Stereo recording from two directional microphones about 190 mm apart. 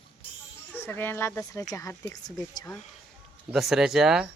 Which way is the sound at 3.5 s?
Centre (ahead or behind).